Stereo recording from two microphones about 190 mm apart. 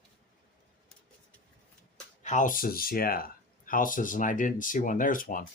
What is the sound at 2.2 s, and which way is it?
Speech, 40° left (ahead or behind).